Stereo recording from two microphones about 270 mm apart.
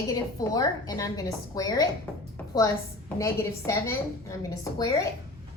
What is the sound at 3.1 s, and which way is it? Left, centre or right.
A woman's voice, centre.